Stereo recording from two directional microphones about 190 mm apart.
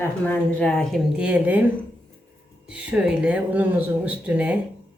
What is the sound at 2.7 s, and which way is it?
A woman's voice, 5° right (ahead or behind).